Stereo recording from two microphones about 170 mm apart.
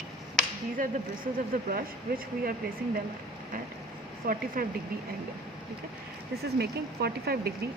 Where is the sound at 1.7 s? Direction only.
60° right (ahead or behind).